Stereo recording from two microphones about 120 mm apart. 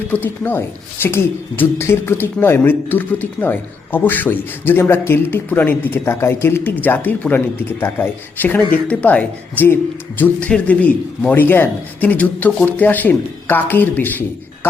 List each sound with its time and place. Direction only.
0.1 s speech: 15° left (ahead or behind)